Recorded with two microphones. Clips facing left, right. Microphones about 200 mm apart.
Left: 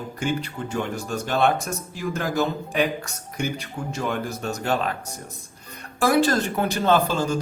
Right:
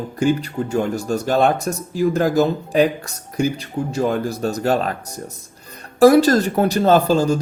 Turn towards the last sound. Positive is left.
turn(degrees=-35)  # may be behind; listen again after turning